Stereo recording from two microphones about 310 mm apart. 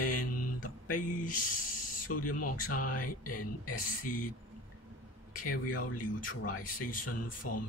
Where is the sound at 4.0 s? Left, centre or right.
Left.